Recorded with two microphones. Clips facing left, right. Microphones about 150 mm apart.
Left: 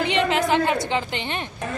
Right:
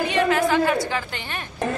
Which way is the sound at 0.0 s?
20° left (ahead or behind).